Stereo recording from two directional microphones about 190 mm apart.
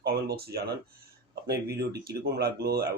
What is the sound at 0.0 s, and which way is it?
Speech, 55° right (ahead or behind).